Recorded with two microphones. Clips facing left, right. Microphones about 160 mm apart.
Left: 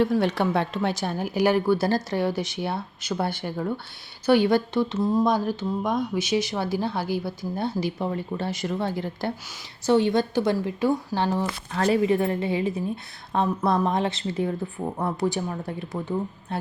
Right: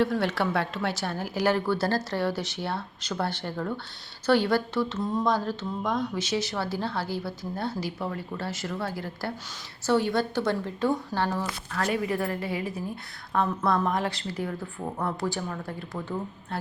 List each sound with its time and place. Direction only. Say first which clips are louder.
0.0 s speech: left 3 dB; 15° left (ahead or behind)